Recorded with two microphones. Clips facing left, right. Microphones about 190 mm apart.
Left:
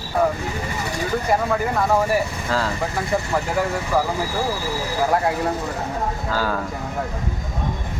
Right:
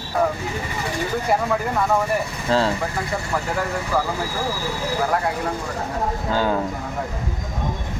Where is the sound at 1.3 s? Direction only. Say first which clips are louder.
Even; 5° right (ahead or behind).